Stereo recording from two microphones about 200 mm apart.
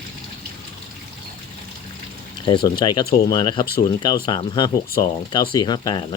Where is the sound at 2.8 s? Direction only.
20° left (ahead or behind).